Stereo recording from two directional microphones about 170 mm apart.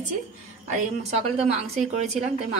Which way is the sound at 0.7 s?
40° right (ahead or behind).